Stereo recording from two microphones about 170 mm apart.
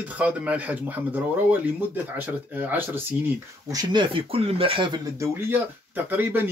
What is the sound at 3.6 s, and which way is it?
Speech, 25° right (ahead or behind).